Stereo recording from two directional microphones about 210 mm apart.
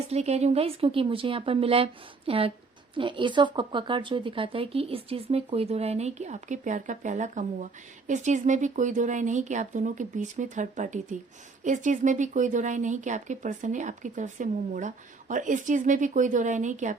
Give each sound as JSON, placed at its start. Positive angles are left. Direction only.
{"t": 0.1, "sound": "a woman's voice", "side_deg": -30}